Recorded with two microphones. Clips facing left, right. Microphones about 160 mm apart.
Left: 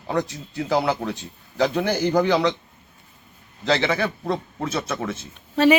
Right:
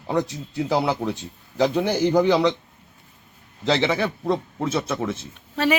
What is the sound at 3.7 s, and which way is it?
A man's voice, 25° right (ahead or behind).